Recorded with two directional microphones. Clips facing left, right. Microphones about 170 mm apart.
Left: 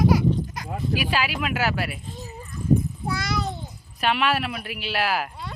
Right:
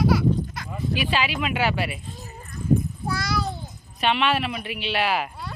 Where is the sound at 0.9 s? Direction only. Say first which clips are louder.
Right 1 dB; 5° left (ahead or behind).